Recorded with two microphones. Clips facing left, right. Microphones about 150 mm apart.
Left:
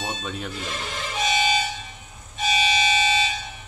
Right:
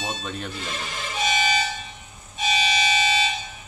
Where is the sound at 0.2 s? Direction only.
5° left (ahead or behind).